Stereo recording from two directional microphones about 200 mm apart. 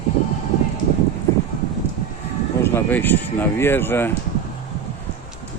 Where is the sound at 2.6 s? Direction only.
10° left (ahead or behind).